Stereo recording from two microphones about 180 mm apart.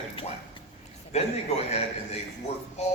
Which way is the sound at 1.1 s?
35° left (ahead or behind).